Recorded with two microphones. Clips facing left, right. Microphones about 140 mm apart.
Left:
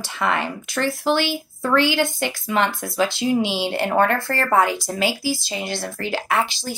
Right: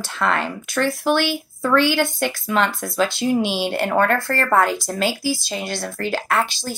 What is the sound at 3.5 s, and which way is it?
Speech, 20° left (ahead or behind).